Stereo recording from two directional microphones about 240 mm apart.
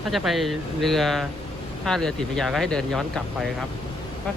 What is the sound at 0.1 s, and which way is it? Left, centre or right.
Speech, centre.